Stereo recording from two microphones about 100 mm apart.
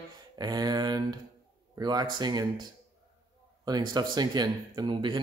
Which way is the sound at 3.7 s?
40° right (ahead or behind).